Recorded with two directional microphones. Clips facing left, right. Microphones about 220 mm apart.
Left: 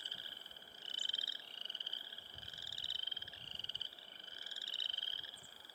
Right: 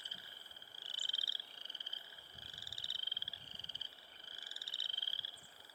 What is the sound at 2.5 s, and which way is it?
Frog, 25° left (ahead or behind).